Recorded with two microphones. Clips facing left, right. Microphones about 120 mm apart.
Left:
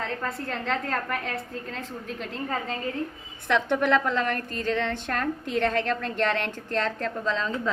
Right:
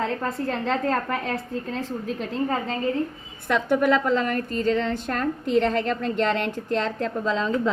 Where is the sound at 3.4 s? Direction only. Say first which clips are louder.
Right 3 dB; 5° right (ahead or behind).